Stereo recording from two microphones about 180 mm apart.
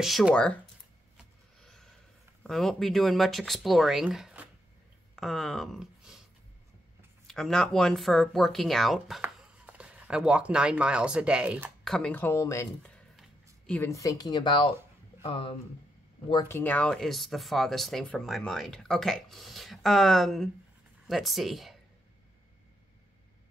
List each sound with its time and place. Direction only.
0.0 s speech: centre (ahead or behind)
1.1 s a sound: 5° left (ahead or behind)
2.4 s speech: centre (ahead or behind)
7.2 s speech: centre (ahead or behind)
12.8 s a sound: centre (ahead or behind)
13.7 s speech: 15° left (ahead or behind); by 15.5 s 30° left (ahead or behind)
16.4 s speech: 10° left (ahead or behind)